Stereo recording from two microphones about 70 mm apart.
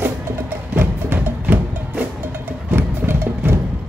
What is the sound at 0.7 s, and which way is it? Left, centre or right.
Music, right.